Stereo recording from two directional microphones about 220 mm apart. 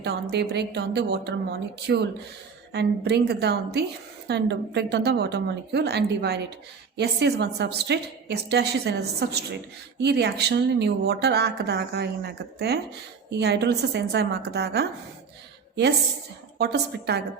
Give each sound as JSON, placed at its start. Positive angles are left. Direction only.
{"t": 0.0, "sound": "speech", "side_deg": -50}
{"t": 16.6, "sound": "speech", "side_deg": -50}